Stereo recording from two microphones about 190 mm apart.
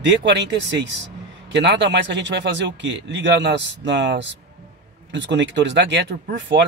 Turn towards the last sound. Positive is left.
turn(degrees=-70)  # may be behind; listen again after turning